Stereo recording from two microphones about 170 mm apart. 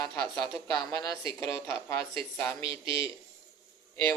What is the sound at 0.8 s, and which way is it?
Speech, 25° left (ahead or behind).